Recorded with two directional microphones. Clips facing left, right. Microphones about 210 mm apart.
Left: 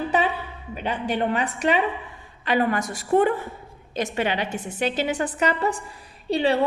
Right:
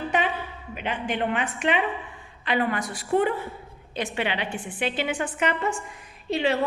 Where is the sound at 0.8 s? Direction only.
40° left (ahead or behind).